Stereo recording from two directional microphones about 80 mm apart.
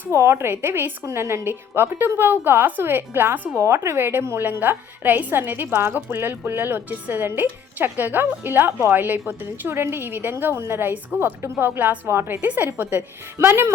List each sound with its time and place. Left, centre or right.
0.1 s a woman's voice: right